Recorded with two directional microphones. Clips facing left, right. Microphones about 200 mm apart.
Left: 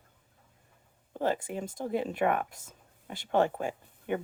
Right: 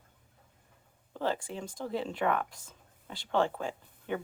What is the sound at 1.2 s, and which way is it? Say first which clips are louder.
Speech: left 3 dB; 15° left (ahead or behind).